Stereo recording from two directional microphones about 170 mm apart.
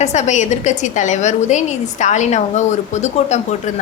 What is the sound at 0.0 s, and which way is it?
A woman's voice, 45° left (ahead or behind).